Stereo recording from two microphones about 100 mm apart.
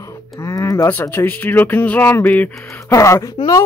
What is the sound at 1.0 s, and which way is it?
Speech, 20° left (ahead or behind).